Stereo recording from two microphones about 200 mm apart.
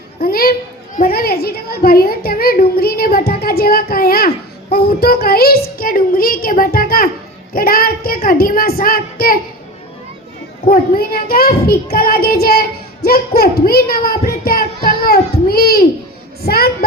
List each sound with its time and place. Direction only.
0.2 s child singing: 50° left (ahead or behind)
10.7 s child singing: 45° left (ahead or behind)